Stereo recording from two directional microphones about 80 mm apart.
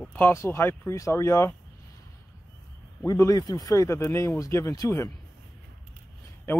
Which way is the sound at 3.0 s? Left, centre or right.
Left.